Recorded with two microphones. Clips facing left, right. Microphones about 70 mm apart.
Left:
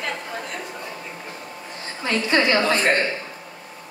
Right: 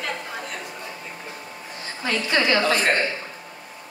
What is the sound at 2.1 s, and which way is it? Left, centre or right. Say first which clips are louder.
Speech: left 2 dB; left.